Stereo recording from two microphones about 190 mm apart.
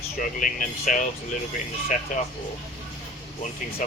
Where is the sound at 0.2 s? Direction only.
45° left (ahead or behind).